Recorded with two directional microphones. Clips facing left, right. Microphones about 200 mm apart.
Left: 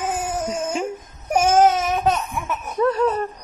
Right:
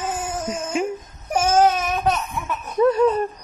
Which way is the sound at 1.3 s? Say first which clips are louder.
Left 1 dB; 15° left (ahead or behind).